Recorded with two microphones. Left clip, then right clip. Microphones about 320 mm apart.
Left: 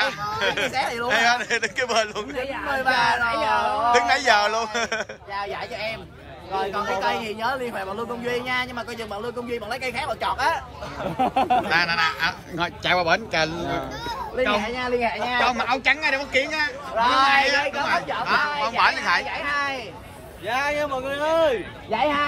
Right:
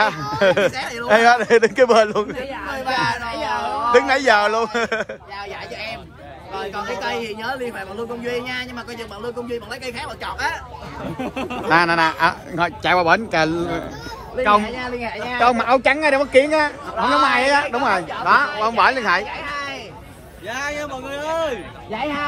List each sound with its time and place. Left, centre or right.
0.0 s a sound: centre
0.7 s speech: centre
1.0 s a man's voice: centre
2.7 s speech: centre
3.4 s a man's voice: centre
6.5 s a man's voice: centre
11.1 s a man's voice: left
11.7 s a man's voice: centre
14.6 s a man's voice: left
15.4 s a man's voice: centre
19.3 s a sound: left
20.4 s a man's voice: left